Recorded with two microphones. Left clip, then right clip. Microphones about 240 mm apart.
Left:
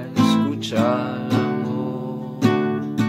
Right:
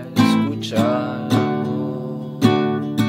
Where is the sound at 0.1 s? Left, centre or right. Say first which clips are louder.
Right 2 dB; right.